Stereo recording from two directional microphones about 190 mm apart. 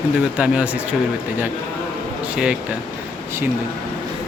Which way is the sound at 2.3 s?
5° right (ahead or behind).